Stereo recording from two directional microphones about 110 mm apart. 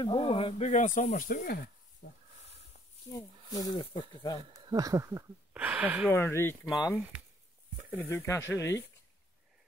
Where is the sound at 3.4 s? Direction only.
35° left (ahead or behind).